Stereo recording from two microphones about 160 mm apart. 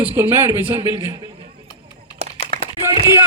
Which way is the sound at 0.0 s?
15° right (ahead or behind).